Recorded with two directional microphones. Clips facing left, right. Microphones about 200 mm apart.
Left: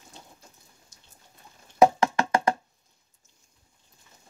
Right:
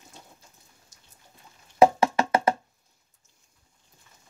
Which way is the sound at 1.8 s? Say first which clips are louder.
Right 1 dB; 5° right (ahead or behind).